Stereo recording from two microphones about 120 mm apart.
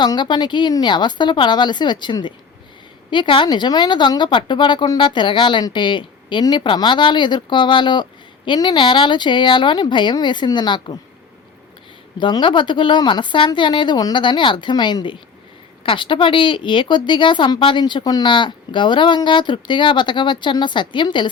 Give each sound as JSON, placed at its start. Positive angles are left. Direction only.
{"t": 0.0, "sound": "speech", "side_deg": 40}
{"t": 12.1, "sound": "speech", "side_deg": 40}